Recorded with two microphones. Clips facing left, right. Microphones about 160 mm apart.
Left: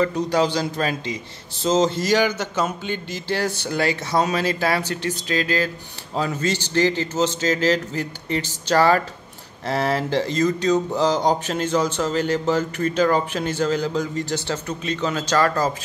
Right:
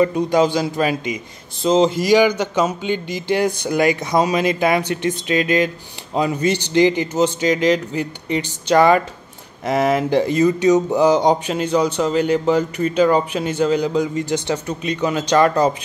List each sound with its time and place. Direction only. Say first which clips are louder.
0.0 s speech: right 4 dB; 15° right (ahead or behind)
10.0 s speech: right 5 dB; 15° right (ahead or behind)